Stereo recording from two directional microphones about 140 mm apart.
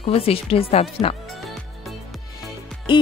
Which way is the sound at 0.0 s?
45° left (ahead or behind).